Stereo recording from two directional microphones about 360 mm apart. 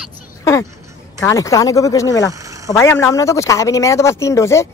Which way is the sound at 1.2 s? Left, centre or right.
Centre.